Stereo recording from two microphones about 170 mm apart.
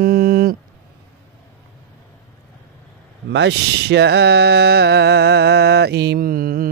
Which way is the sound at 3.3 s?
85° right.